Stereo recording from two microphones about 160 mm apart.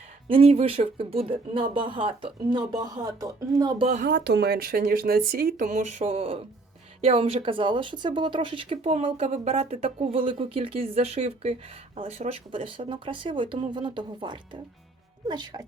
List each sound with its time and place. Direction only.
0.3 s speech: 35° right (ahead or behind)
4.0 s speech: 85° right; by 15.6 s 30° right (ahead or behind)